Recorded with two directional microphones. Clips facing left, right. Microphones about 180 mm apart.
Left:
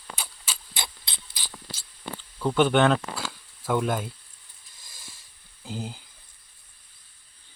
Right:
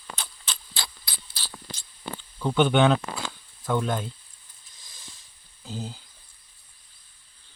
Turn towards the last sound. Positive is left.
turn(degrees=15)  # may be behind; listen again after turning